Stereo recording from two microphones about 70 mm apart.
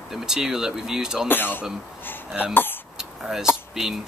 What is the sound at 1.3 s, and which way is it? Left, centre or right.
Speech, left.